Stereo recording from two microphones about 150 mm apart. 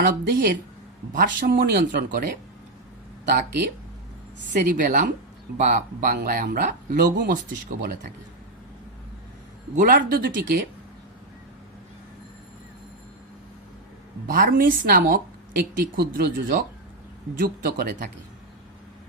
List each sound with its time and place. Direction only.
0.0 s speech: 80° right
1.1 s speech: 65° right (ahead or behind); by 2.2 s 90° right
4.7 s speech: 60° right (ahead or behind)
6.9 s speech: 70° right (ahead or behind)
9.7 s speech: 65° right (ahead or behind)
14.3 s speech: 70° right (ahead or behind)